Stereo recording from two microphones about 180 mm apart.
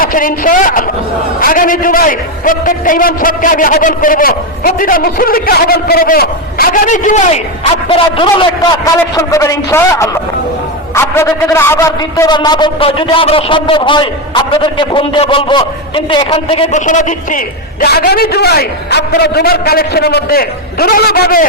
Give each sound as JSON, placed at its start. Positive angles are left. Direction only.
{"t": 0.0, "sound": "a man's voice", "side_deg": 50}
{"t": 16.8, "sound": "a man's voice", "side_deg": 45}